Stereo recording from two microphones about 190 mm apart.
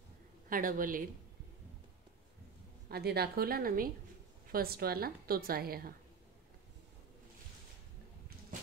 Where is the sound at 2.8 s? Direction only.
55° right (ahead or behind).